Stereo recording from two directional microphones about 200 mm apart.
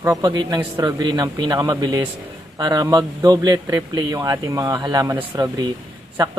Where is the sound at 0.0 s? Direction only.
20° right (ahead or behind).